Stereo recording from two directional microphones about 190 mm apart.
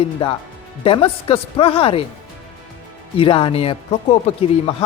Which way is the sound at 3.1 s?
25° left (ahead or behind).